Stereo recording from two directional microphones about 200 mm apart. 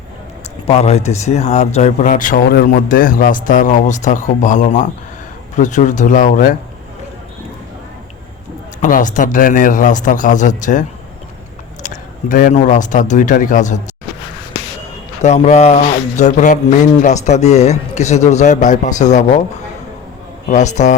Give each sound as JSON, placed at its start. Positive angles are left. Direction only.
{"t": 0.7, "sound": "speech", "side_deg": 30}
{"t": 8.8, "sound": "a man's voice", "side_deg": 40}
{"t": 15.2, "sound": "speech", "side_deg": 35}